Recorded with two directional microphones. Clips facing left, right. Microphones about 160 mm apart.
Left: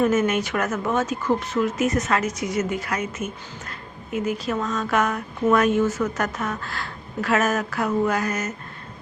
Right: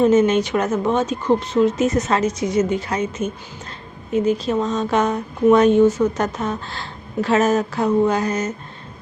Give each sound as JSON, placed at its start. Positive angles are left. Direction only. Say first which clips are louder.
{"t": 0.0, "sound": "a woman's voice", "louder": "right 6 dB", "side_deg": -20}